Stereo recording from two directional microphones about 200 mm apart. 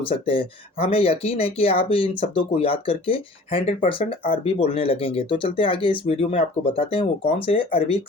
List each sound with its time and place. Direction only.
0.1 s speech: 25° left (ahead or behind)